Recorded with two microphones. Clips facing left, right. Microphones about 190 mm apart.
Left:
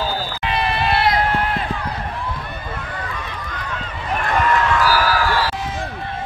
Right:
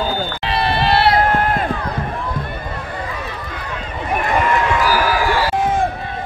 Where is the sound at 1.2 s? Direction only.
50° right (ahead or behind).